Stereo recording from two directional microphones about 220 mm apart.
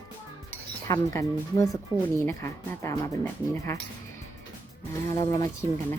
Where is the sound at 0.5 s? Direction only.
10° left (ahead or behind).